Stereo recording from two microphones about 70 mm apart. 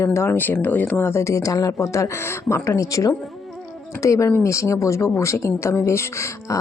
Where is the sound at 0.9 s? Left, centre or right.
Left.